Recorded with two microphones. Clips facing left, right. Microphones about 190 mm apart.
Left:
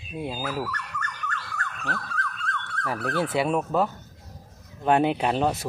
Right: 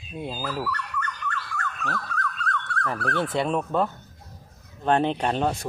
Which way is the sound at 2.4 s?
25° left (ahead or behind).